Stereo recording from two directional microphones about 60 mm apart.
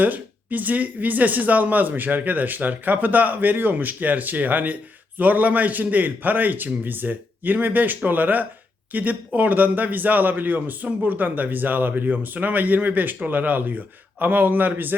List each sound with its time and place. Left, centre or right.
0.0 s speech: right